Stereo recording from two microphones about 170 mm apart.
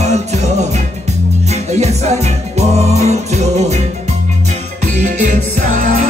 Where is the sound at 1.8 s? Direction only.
40° right (ahead or behind).